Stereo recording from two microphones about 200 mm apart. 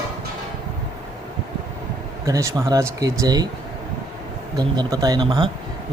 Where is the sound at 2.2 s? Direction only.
15° right (ahead or behind).